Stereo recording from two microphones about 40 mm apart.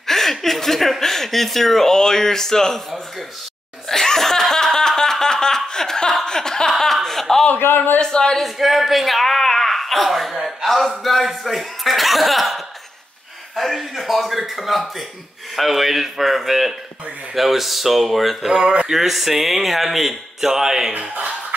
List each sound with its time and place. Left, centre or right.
0.0 s speech: centre
3.9 s laughter: centre
5.7 s chuckle: centre
6.2 s a sound: centre
6.8 s chuckle: centre
7.5 s a man's voice: left
8.0 s speech: centre
8.4 s speech: centre
18.5 s speech: right
18.9 s speech: centre
21.1 s a sound: right